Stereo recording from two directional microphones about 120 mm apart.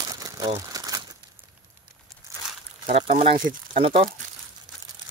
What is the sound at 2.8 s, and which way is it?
Speech, 65° right (ahead or behind).